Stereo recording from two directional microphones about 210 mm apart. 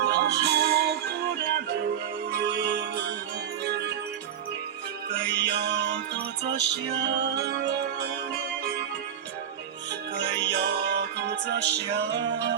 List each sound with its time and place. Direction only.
0.0 s music: 50° right (ahead or behind)
2.4 s music: 50° right (ahead or behind)
5.1 s music: 55° right (ahead or behind)
10.2 s music: 55° right (ahead or behind)